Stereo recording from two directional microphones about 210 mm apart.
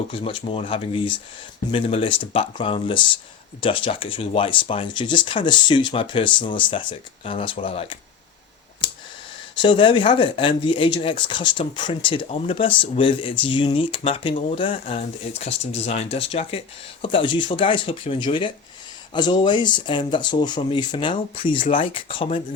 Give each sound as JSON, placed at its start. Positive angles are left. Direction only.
{"t": 0.1, "sound": "speech", "side_deg": 25}
{"t": 9.6, "sound": "speech", "side_deg": 25}